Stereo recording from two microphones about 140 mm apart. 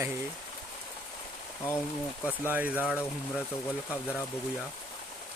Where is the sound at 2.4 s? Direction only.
10° right (ahead or behind).